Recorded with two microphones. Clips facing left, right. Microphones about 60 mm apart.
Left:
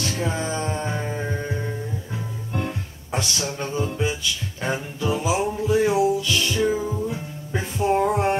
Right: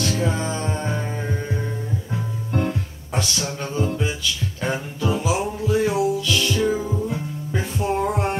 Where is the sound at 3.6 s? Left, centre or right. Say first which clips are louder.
Right 2 dB; centre.